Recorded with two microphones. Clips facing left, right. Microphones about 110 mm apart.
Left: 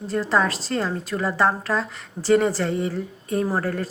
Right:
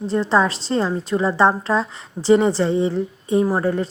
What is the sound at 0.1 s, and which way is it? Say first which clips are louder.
A woman's voice: right 3 dB; 25° right (ahead or behind).